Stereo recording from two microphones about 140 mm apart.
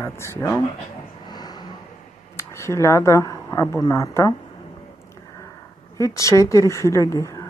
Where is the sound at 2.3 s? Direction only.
20° left (ahead or behind).